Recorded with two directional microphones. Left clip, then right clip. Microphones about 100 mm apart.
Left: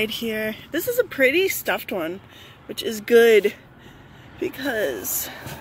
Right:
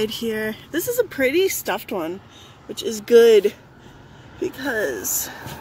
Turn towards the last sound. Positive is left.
turn(degrees=35)  # may be behind; listen again after turning